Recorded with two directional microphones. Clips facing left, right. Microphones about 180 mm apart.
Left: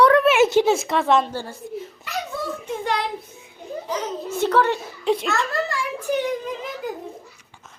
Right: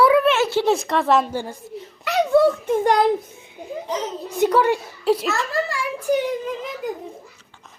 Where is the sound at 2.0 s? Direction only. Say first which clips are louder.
Right 16 dB; 70° right (ahead or behind); by 3.0 s 50° right (ahead or behind).